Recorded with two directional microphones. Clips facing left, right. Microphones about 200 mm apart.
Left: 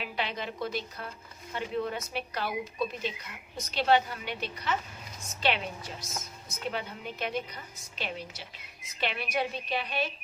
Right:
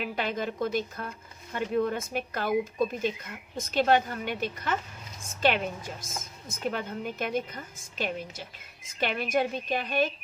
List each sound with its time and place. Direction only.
0.0 s a woman's voice: 45° right (ahead or behind)